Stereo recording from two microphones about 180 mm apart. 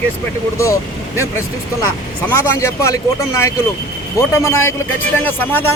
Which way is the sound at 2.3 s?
15° left (ahead or behind).